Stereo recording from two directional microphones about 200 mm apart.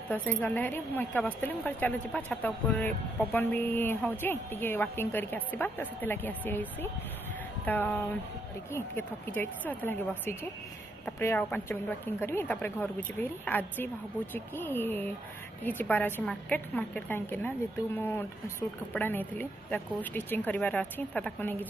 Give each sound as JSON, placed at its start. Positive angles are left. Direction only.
{"t": 0.1, "sound": "speech", "side_deg": 10}